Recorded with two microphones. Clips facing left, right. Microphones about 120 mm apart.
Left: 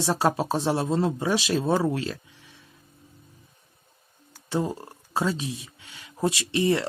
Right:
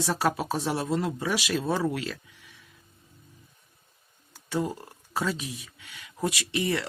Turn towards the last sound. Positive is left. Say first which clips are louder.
# left 5 dB
turn(degrees=25)  # may be behind; listen again after turning